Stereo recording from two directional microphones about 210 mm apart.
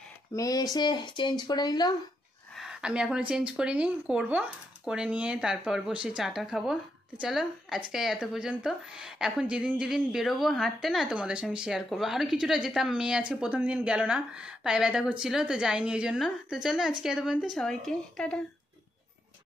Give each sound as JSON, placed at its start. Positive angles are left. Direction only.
{"t": 0.3, "sound": "speech", "side_deg": 15}
{"t": 2.5, "sound": "a woman's voice", "side_deg": 0}